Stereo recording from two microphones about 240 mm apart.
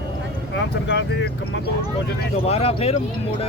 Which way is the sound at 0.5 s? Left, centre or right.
Left.